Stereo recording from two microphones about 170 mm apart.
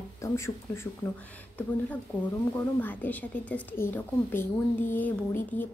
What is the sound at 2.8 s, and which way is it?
A woman's voice, 10° left (ahead or behind).